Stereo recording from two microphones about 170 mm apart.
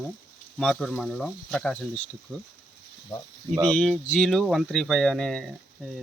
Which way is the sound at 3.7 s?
5° left (ahead or behind).